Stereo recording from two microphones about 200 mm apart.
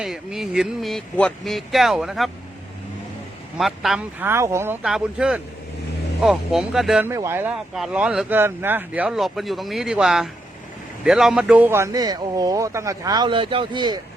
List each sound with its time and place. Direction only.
0.0 s speech: 5° right (ahead or behind)
3.6 s speech: centre (ahead or behind); by 14.0 s 20° right (ahead or behind)